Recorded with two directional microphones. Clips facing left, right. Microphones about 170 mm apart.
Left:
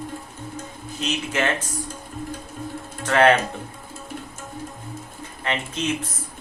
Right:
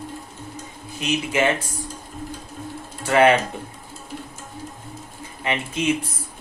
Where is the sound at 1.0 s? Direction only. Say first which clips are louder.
Right 3 dB; 10° right (ahead or behind).